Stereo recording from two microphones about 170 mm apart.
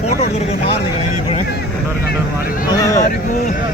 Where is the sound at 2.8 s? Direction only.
20° left (ahead or behind).